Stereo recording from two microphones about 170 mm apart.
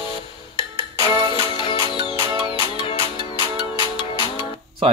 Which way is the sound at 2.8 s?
30° left (ahead or behind).